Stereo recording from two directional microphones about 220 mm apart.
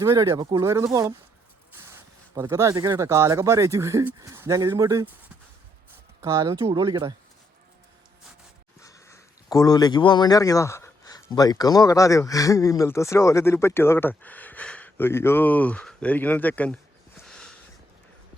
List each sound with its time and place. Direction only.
0.0 s speech: 15° right (ahead or behind)
6.2 s speech: 15° right (ahead or behind)
8.8 s speech: 15° left (ahead or behind)
17.2 s a sound: 5° left (ahead or behind)